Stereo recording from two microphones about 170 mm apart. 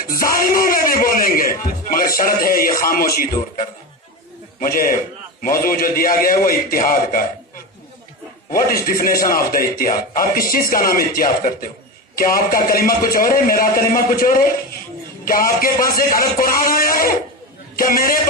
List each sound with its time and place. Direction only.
0.0 s music: 55° left (ahead or behind)
2.9 s a man's voice: 55° left (ahead or behind)
8.5 s a man's voice: 55° left (ahead or behind)